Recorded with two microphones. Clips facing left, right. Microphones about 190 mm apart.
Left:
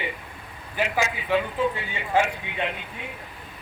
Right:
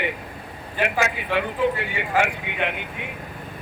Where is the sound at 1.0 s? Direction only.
65° right (ahead or behind).